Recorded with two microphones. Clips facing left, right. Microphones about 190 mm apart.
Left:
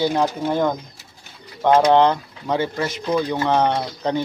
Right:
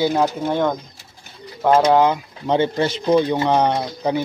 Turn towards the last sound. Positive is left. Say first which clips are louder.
# right 1 dB
turn(degrees=-10)  # may be behind; listen again after turning